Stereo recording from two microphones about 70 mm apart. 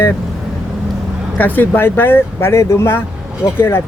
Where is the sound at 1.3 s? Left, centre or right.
Left.